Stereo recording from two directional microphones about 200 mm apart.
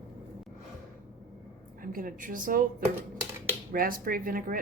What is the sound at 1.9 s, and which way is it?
Speech, 45° right (ahead or behind).